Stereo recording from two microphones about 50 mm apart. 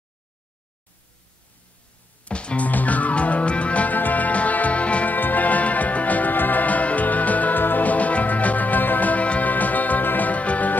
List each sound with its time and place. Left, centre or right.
2.2 s music: left